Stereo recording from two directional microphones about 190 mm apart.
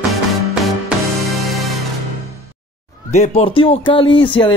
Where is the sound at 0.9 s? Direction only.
5° right (ahead or behind).